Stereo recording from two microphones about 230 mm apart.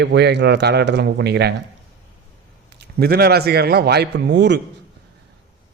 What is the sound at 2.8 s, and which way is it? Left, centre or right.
A man's voice, right.